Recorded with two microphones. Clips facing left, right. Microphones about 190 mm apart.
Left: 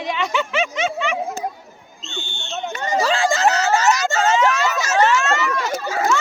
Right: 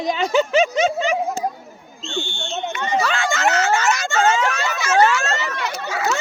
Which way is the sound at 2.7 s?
35° left (ahead or behind).